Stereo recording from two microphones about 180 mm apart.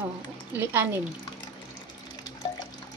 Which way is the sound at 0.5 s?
10° right (ahead or behind).